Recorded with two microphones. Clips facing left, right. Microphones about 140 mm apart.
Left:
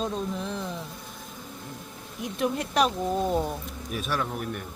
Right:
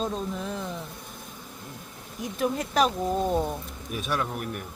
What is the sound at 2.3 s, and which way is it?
A man's voice, centre (ahead or behind).